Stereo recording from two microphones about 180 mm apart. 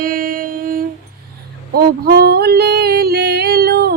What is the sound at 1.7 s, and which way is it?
Music, 60° right (ahead or behind).